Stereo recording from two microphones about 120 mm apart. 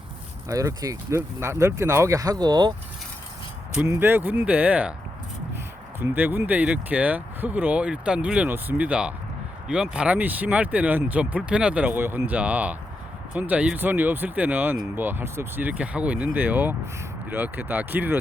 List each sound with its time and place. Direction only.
0.4 s speech: 30° right (ahead or behind)
3.8 s speech: 20° right (ahead or behind)
6.0 s speech: 15° right (ahead or behind)